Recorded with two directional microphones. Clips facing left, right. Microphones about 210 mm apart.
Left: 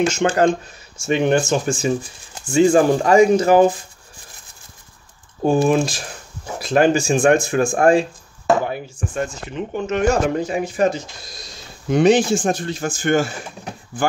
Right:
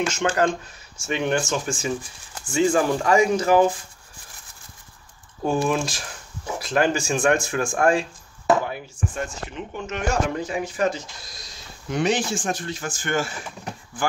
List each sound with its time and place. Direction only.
0.0 s speech: 30° left (ahead or behind)
5.4 s speech: 25° left (ahead or behind)
10.4 s speech: 20° left (ahead or behind)
12.0 s speech: 25° left (ahead or behind)